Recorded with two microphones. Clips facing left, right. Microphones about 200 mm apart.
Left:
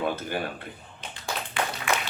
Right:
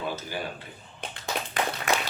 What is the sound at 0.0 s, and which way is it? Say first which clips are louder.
Speech: left 4 dB; 55° left (ahead or behind).